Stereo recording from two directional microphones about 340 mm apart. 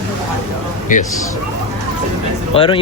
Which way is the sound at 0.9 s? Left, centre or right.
Left.